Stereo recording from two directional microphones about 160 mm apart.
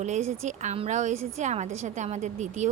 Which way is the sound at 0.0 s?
45° right (ahead or behind).